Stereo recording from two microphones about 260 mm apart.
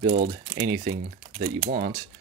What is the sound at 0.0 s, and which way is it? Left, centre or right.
Speech, right.